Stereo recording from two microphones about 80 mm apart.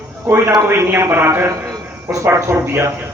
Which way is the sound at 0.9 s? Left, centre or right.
Right.